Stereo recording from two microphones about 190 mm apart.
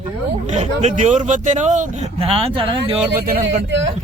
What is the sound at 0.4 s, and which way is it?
A man's voice, 35° right (ahead or behind).